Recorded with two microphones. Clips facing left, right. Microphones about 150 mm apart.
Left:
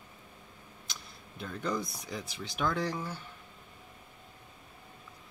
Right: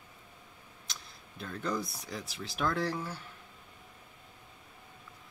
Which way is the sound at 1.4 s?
Centre (ahead or behind).